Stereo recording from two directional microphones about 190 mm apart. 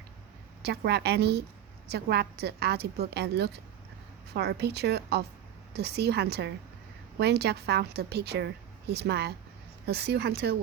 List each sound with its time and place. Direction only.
0.6 s a woman's voice: 60° right (ahead or behind)